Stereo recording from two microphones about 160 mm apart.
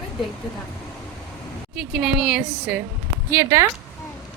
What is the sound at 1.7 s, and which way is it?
A woman's voice, 5° right (ahead or behind).